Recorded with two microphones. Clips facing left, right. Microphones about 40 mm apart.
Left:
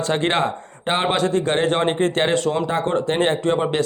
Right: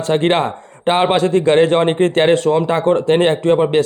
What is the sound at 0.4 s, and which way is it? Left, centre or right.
A man's voice, right.